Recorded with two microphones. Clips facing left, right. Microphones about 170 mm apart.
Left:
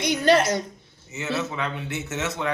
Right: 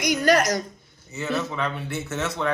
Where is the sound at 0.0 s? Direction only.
25° left (ahead or behind).